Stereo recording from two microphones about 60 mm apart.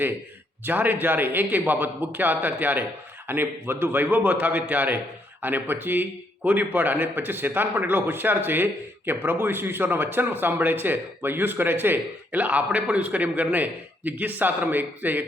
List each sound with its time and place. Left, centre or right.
0.6 s a man's voice: right